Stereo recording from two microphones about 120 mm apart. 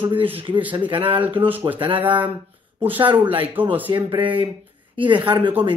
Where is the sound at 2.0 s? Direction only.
15° right (ahead or behind).